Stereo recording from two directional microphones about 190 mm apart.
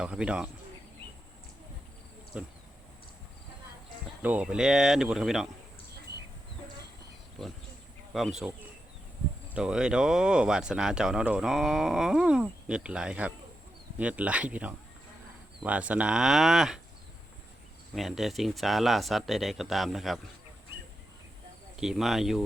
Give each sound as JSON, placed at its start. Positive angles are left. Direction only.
{"t": 0.0, "sound": "speech", "side_deg": -5}
{"t": 2.3, "sound": "speech", "side_deg": -5}
{"t": 4.2, "sound": "speech", "side_deg": -10}
{"t": 6.1, "sound": "a sound", "side_deg": -60}
{"t": 8.1, "sound": "speech", "side_deg": 0}
{"t": 9.6, "sound": "speech", "side_deg": -5}
{"t": 17.9, "sound": "speech", "side_deg": 0}
{"t": 21.8, "sound": "speech", "side_deg": 0}